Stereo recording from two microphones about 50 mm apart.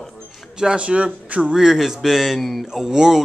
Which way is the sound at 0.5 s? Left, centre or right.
Centre.